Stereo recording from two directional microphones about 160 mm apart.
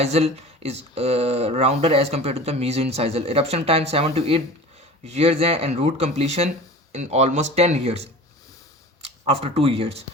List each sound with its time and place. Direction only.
0.0 s speech: 40° right (ahead or behind)